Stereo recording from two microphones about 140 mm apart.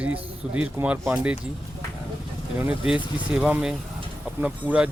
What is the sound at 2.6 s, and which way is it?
Speech, 10° right (ahead or behind).